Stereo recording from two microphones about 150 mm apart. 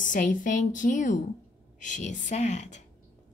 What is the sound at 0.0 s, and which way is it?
A woman's voice, 60° left (ahead or behind).